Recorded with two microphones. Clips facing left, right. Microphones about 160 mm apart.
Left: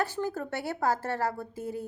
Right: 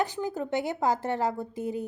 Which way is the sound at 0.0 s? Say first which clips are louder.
Right 1 dB; 15° right (ahead or behind).